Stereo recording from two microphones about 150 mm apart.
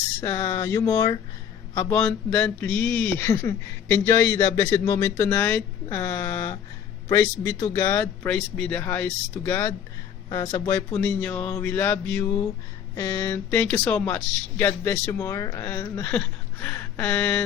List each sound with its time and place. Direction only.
0.2 s a man's voice: 20° left (ahead or behind)
10.9 s speech: 10° left (ahead or behind)